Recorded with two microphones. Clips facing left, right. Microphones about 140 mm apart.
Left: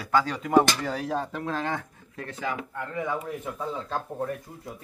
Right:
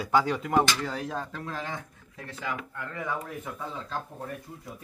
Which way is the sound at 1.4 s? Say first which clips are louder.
Left 6 dB; 70° left (ahead or behind).